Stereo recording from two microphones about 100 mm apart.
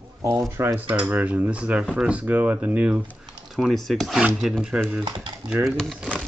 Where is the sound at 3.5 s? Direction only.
Centre (ahead or behind).